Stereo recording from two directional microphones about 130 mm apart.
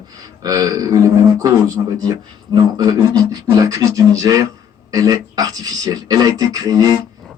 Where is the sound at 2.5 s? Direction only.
30° right (ahead or behind).